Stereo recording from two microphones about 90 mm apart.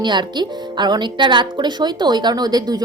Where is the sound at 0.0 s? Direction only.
55° right (ahead or behind).